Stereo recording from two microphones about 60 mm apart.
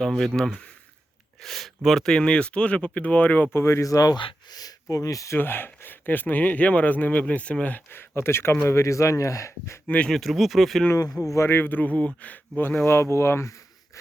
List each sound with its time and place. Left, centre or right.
0.0 s speech: centre; by 3.5 s left
3.5 s speech: left
4.5 s speech: left
5.4 s speech: left
7.9 s speech: left
9.8 s speech: left
10.1 s speech: centre
11.4 s speech: left